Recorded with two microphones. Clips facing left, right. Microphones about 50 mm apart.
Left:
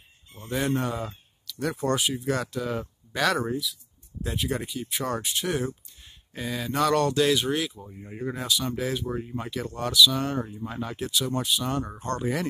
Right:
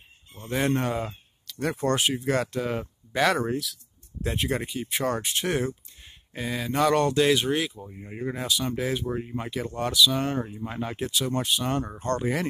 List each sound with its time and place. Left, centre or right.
0.4 s speech: right
1.5 s a sound: right
1.8 s speech: right
3.5 s speech: right
4.2 s speech: right
6.3 s speech: right
11.1 s speech: right
12.2 s speech: right